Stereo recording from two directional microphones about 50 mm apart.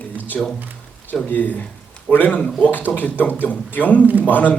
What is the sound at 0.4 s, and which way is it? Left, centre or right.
Speech, centre.